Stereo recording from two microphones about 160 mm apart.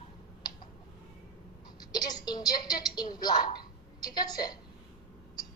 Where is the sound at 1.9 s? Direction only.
25° left (ahead or behind).